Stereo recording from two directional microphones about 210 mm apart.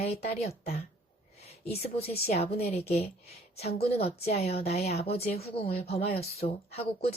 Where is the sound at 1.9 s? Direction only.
30° left (ahead or behind).